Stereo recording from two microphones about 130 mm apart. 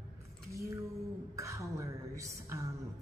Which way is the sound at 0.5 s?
25° right (ahead or behind).